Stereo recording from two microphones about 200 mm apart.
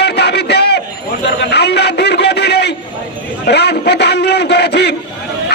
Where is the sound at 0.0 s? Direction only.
55° left (ahead or behind).